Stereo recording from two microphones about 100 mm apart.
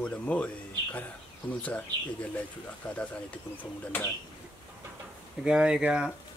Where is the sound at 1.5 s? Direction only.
15° left (ahead or behind).